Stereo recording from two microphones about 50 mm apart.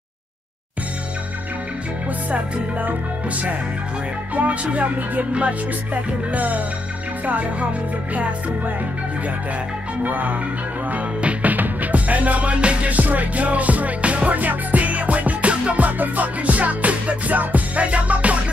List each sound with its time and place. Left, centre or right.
4.4 s music: right
8.1 s music: right
10.0 s music: right